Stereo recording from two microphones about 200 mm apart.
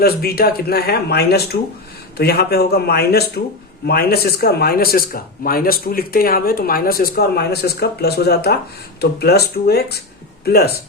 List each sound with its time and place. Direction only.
0.0 s speech: 50° left (ahead or behind)